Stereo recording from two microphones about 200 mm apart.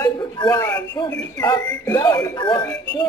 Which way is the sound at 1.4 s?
20° left (ahead or behind).